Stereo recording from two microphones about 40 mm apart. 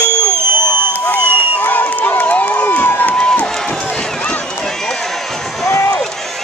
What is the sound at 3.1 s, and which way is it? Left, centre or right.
Crowd, left.